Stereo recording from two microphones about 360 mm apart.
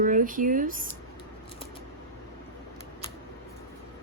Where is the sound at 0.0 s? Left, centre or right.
Right.